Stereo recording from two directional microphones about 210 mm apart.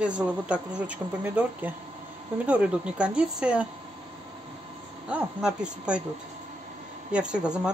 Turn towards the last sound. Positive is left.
turn(degrees=-5)  # may be behind; listen again after turning